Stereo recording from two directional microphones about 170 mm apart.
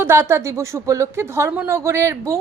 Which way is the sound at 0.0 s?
15° right (ahead or behind).